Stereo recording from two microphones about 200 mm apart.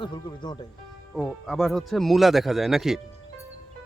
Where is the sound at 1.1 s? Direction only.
Centre (ahead or behind).